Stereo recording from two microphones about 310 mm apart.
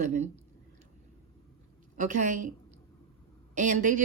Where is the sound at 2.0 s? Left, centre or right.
Right.